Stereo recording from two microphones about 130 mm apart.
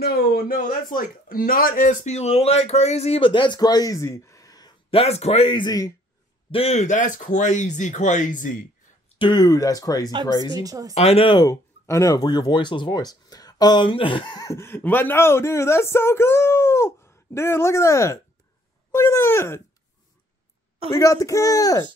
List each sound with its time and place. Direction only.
0.5 s speech: 90° left
2.1 s speech: 50° left (ahead or behind); by 4.7 s 30° left (ahead or behind)
4.9 s speech: 50° left (ahead or behind); by 5.9 s 30° left (ahead or behind)
6.5 s speech: 55° left (ahead or behind); by 8.6 s 90° left
9.2 s speech: 35° left (ahead or behind)
10.5 s speech: 30° right (ahead or behind)
11.0 s speech: 50° left (ahead or behind)
11.4 s speech: 20° left (ahead or behind); by 14.4 s 40° left (ahead or behind)
14.4 s speech: 20° left (ahead or behind)
20.9 s speech: 25° left (ahead or behind)